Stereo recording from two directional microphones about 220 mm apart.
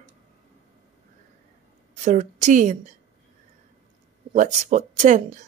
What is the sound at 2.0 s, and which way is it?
Speech, 35° right (ahead or behind).